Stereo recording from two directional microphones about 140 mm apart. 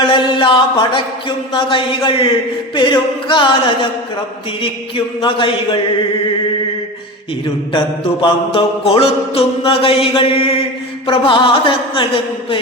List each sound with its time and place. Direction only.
0.1 s music: 35° left (ahead or behind)
1.5 s mantra: 35° left (ahead or behind)
4.6 s mantra: 35° left (ahead or behind)
7.7 s mantra: 35° left (ahead or behind)